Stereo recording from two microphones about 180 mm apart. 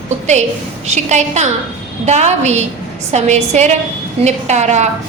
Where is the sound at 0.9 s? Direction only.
40° right (ahead or behind).